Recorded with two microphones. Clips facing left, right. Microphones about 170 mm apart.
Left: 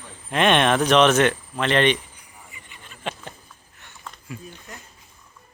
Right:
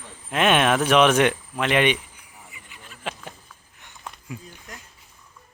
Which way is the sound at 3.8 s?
15° right (ahead or behind).